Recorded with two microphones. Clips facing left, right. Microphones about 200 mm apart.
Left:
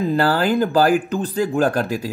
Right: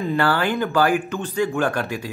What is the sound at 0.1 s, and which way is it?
Speech, 35° left (ahead or behind).